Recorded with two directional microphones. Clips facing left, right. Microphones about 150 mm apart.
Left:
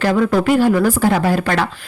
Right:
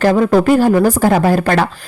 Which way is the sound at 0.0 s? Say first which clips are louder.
Right 4 dB; 40° right (ahead or behind).